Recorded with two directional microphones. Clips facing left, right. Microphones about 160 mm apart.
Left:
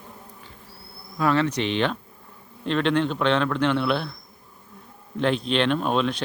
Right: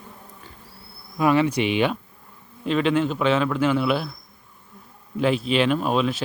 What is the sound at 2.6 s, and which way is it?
Speech, 5° right (ahead or behind).